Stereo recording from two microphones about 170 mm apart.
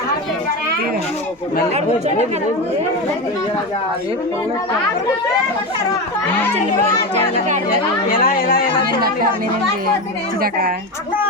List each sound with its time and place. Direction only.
8.1 s speech: 60° left (ahead or behind)